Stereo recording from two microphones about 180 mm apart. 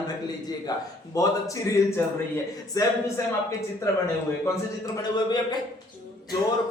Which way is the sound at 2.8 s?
20° left (ahead or behind).